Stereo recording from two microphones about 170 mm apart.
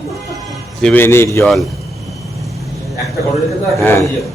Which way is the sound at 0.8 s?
10° left (ahead or behind).